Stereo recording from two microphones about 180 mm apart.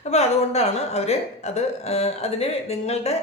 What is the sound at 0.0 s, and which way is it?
Speech, 40° left (ahead or behind).